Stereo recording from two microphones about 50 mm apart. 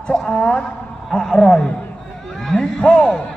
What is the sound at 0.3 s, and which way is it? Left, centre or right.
A woman's voice, left.